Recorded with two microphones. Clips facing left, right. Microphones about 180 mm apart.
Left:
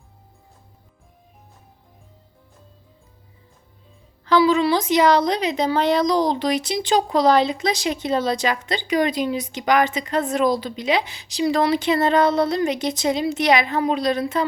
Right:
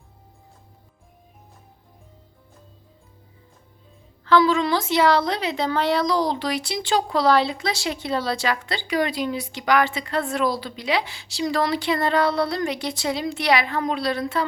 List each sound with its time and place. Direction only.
4.3 s a woman's voice: 15° left (ahead or behind)